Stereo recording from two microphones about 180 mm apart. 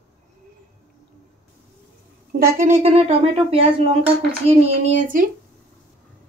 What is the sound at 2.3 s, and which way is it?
Speech, 50° right (ahead or behind).